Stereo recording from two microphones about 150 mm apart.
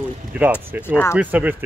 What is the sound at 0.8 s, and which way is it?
Speech, 15° left (ahead or behind).